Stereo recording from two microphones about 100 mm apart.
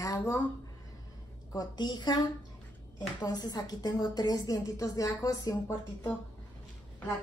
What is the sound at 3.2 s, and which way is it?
A woman's voice, 40° left (ahead or behind).